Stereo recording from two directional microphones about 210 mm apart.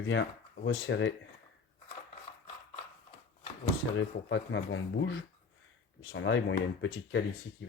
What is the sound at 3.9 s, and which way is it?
Speech, 60° left (ahead or behind).